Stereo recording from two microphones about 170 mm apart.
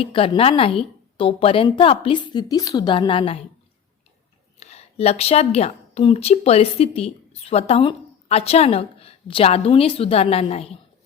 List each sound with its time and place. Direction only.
0.0 s a woman's voice: 35° left (ahead or behind)
4.6 s a woman's voice: 40° left (ahead or behind)